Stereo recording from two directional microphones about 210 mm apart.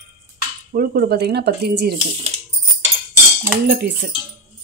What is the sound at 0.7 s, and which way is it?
A woman's voice, 45° right (ahead or behind).